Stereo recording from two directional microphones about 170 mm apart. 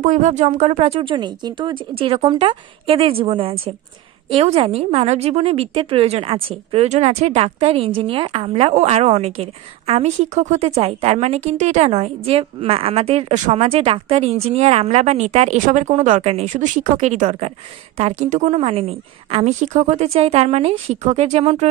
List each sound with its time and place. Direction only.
0.0 s a woman's voice: 45° right (ahead or behind)